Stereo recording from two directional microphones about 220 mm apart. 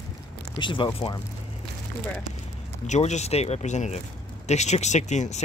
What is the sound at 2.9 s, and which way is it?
Speech, 30° left (ahead or behind).